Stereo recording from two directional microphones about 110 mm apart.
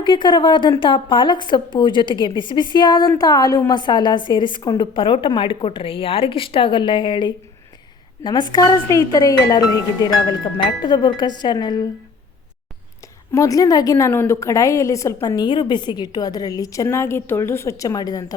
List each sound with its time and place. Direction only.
0.0 s a woman's voice: 45° left (ahead or behind)
10.8 s a woman's voice: 45° left (ahead or behind)
13.3 s a woman's voice: 30° left (ahead or behind)